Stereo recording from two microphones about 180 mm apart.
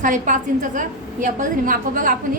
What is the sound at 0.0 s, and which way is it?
A woman's voice, 45° right (ahead or behind).